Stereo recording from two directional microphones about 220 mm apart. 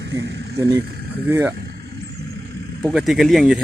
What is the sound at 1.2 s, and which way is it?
Speech, 10° right (ahead or behind).